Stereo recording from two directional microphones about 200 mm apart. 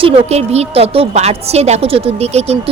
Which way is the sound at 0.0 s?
30° right (ahead or behind).